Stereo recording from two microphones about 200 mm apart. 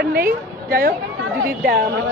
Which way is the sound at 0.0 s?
50° right (ahead or behind).